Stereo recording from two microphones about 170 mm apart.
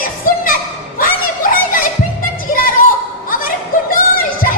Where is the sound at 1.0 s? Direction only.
55° left (ahead or behind).